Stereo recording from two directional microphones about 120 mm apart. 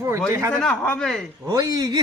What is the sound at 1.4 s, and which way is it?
Speech, 30° right (ahead or behind).